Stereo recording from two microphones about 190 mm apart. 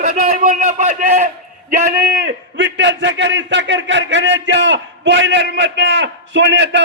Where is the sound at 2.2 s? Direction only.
65° right (ahead or behind).